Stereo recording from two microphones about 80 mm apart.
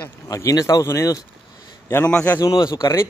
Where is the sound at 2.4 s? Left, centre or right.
Left.